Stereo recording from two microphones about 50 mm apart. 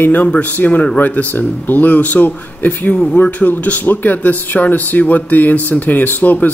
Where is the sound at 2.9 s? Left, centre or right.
Left.